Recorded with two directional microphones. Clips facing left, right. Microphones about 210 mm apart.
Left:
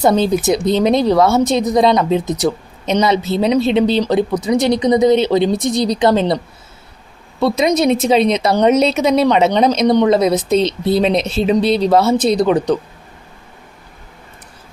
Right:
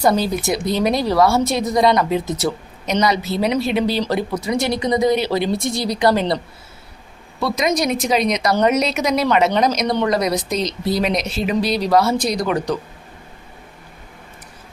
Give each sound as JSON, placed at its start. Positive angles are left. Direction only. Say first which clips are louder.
{"t": 0.2, "sound": "a woman's voice", "louder": "left 6 dB", "side_deg": 20}